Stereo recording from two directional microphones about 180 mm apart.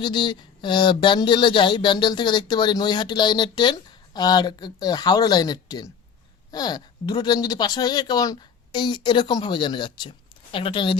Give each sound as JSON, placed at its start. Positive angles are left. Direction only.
{"t": 0.0, "sound": "speech", "side_deg": 25}